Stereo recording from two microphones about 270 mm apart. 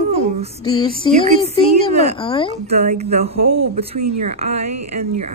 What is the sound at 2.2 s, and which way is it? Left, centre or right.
Speech, centre.